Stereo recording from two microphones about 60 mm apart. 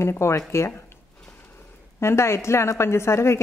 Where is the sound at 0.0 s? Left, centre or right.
Left.